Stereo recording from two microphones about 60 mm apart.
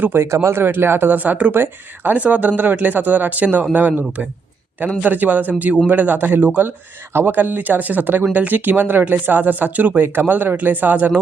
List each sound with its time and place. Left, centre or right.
0.0 s speech: right
0.3 s speech: right
2.1 s speech: right